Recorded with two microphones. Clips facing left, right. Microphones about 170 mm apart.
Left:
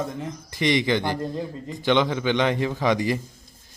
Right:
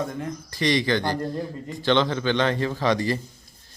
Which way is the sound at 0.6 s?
20° left (ahead or behind).